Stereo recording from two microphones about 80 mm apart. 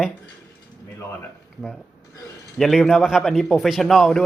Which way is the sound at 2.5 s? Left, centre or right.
Centre.